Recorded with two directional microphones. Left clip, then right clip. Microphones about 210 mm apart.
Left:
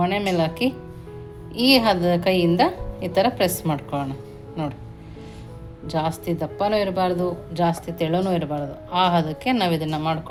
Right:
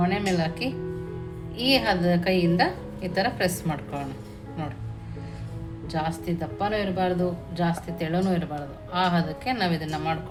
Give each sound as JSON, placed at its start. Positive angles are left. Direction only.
{"t": 0.0, "sound": "speech", "side_deg": 35}
{"t": 5.9, "sound": "speech", "side_deg": 35}